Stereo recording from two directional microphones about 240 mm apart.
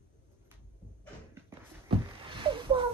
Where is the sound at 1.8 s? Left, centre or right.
Right.